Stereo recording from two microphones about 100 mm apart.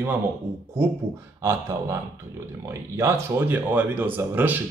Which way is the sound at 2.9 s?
25° right (ahead or behind).